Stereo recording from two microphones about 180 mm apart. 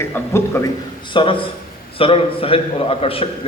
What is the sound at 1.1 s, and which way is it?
A man's voice, 30° left (ahead or behind).